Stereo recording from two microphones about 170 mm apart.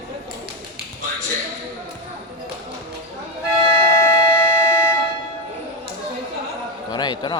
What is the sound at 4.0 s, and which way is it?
Civil defense siren, 15° left (ahead or behind).